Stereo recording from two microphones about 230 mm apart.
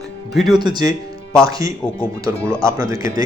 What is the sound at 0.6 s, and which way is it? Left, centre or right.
A man's voice, centre.